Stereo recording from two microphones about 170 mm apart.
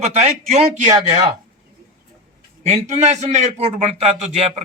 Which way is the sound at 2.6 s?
40° right (ahead or behind).